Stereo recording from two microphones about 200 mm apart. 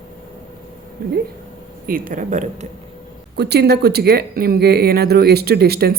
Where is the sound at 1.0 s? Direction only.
50° right (ahead or behind).